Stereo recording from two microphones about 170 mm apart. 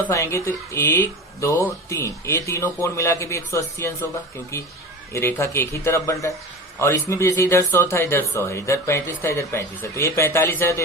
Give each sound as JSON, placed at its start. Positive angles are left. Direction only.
{"t": 0.0, "sound": "speech", "side_deg": 15}